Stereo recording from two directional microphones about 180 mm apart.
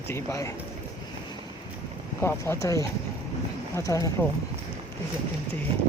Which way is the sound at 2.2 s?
15° left (ahead or behind).